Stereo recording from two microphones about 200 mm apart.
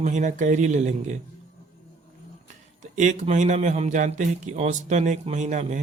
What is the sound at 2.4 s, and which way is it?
Speech, 40° right (ahead or behind).